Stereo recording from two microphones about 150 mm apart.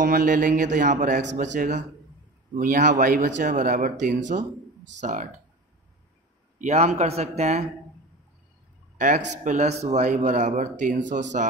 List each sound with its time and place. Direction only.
0.0 s a man's voice: 65° right (ahead or behind)
6.6 s speech: 45° right (ahead or behind)
8.9 s a man's voice: 55° right (ahead or behind)